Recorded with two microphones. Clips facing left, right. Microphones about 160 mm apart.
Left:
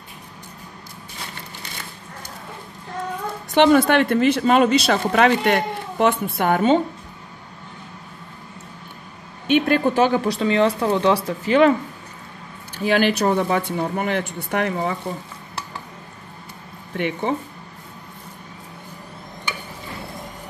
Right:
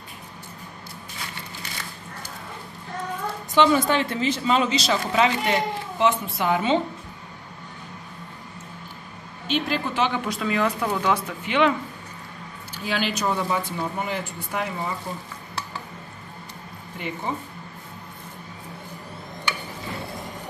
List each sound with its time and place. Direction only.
3.5 s speech: 60° left (ahead or behind)
9.5 s speech: 50° left (ahead or behind)
12.8 s speech: 55° left (ahead or behind)
16.9 s speech: 70° left (ahead or behind)